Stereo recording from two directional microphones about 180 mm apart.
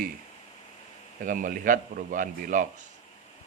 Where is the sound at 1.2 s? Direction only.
50° right (ahead or behind).